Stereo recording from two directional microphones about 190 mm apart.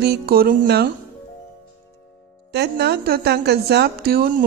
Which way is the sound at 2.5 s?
60° right (ahead or behind).